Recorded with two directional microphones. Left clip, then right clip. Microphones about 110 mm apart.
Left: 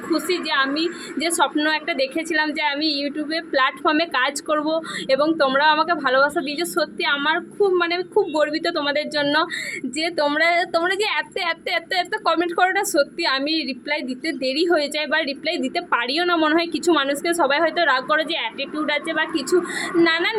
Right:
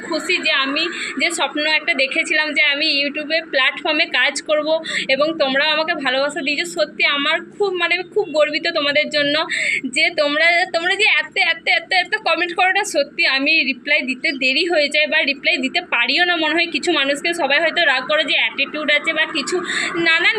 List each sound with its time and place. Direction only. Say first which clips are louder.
1.2 s a woman's voice: right 1 dB; 40° left (ahead or behind)
19.7 s speech: even; centre (ahead or behind)
20.1 s a woman's voice: right 9 dB; 45° left (ahead or behind)